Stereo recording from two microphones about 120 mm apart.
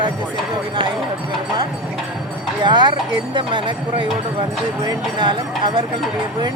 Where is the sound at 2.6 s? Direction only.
40° right (ahead or behind).